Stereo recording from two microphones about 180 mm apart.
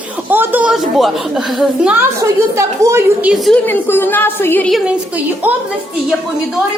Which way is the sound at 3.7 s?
10° left (ahead or behind).